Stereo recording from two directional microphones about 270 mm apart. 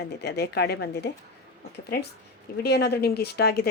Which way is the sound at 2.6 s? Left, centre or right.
Left.